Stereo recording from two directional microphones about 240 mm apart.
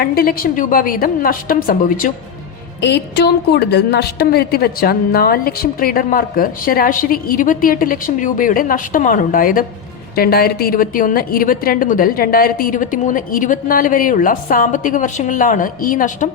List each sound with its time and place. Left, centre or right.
0.0 s a woman's voice: left